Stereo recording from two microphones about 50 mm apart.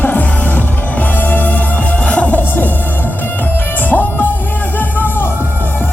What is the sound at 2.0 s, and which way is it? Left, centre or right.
Music, left.